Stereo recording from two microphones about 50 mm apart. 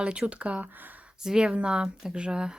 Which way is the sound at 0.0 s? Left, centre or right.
Right.